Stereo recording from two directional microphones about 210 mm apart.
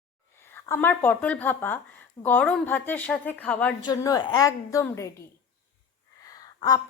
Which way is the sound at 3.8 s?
20° left (ahead or behind).